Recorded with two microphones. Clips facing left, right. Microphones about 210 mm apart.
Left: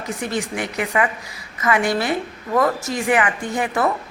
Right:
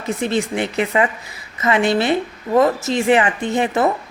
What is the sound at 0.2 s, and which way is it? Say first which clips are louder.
Speech: right 5 dB; 25° right (ahead or behind).